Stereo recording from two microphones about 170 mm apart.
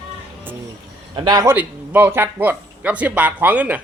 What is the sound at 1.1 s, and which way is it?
Speech, 25° right (ahead or behind).